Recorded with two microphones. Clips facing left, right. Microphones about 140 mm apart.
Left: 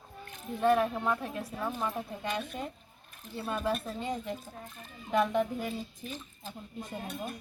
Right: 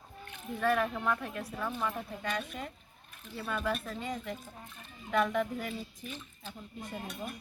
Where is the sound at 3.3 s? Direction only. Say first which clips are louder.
Left 2 dB; 25° left (ahead or behind).